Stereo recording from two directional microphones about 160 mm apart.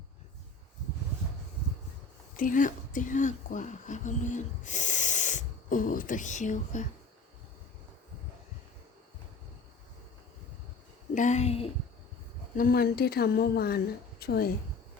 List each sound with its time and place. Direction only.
2.3 s speech: 55° left (ahead or behind)
11.1 s a woman's voice: 50° left (ahead or behind)
12.5 s a woman's voice: 65° left (ahead or behind)